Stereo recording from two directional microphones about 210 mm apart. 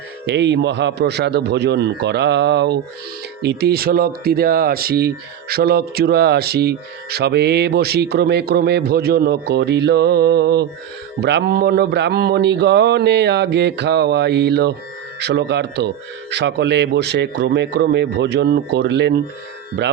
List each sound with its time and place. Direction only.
0.3 s speech: 55° right (ahead or behind)